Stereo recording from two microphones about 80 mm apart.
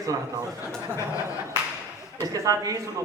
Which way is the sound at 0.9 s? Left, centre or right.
Left.